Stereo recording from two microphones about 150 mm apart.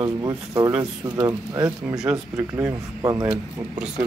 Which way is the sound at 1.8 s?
5° right (ahead or behind).